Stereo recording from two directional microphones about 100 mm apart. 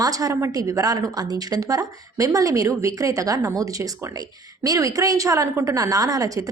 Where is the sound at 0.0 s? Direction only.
35° right (ahead or behind).